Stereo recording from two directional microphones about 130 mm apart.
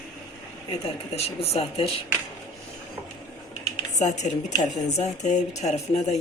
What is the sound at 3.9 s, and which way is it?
Speech, 65° left (ahead or behind).